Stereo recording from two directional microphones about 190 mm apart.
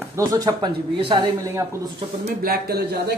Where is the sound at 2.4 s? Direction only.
50° right (ahead or behind).